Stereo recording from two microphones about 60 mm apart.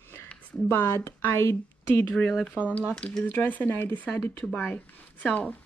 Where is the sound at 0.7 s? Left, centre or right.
Left.